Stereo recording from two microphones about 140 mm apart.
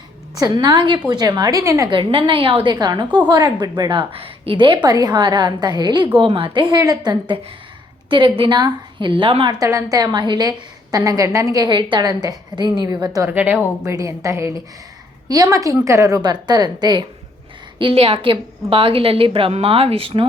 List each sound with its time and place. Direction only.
0.3 s a woman's voice: 30° right (ahead or behind)
1.9 s a woman's voice: 35° right (ahead or behind)
13.3 s speech: 10° right (ahead or behind)
13.8 s a woman's voice: 20° right (ahead or behind)
17.7 s a woman's voice: 40° right (ahead or behind)